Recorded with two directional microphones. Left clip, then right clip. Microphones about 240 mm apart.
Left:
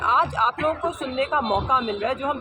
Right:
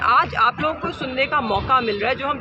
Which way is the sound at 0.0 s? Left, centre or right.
Centre.